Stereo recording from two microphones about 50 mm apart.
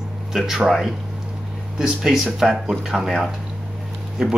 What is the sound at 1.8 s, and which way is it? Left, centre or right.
Speech, centre.